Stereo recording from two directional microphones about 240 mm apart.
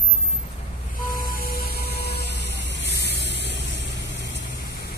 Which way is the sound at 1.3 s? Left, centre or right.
Left.